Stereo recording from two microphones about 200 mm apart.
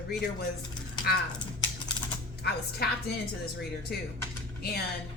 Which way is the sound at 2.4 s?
55° left (ahead or behind).